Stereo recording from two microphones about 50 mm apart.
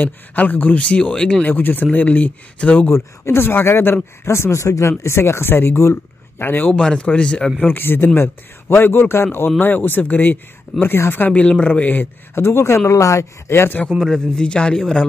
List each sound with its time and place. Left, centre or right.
0.0 s speech: left
0.7 s speech: left
1.4 s speech: left
2.9 s speech: left
6.7 s a man's voice: centre
7.6 s a man's voice: left
9.6 s speech: left
14.0 s a man's voice: centre